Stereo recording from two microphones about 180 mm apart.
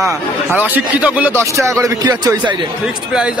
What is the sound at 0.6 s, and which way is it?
Speech, 10° right (ahead or behind).